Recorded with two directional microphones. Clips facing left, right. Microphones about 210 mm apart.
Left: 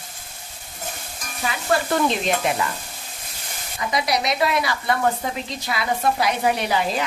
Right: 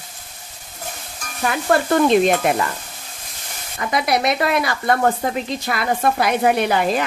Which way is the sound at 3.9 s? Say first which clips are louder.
Right 4 dB; 55° right (ahead or behind).